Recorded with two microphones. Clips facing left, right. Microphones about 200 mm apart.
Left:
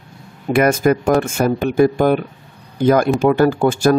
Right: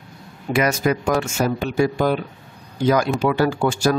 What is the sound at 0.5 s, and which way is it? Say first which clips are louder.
Speech: left 5 dB; 55° left (ahead or behind).